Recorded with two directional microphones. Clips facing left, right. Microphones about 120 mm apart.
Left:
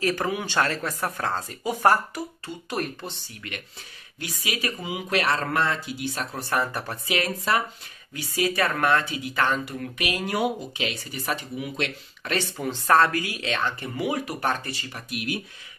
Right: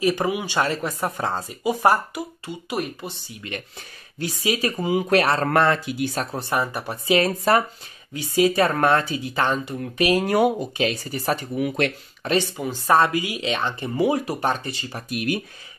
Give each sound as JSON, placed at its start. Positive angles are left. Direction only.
{"t": 0.0, "sound": "speech", "side_deg": -15}
{"t": 4.2, "sound": "speech", "side_deg": -30}
{"t": 5.5, "sound": "speech", "side_deg": -60}
{"t": 6.5, "sound": "speech", "side_deg": -15}
{"t": 7.1, "sound": "speech", "side_deg": -35}
{"t": 8.1, "sound": "speech", "side_deg": -25}
{"t": 11.5, "sound": "speech", "side_deg": -55}
{"t": 12.5, "sound": "speech", "side_deg": -10}
{"t": 15.0, "sound": "speech", "side_deg": -45}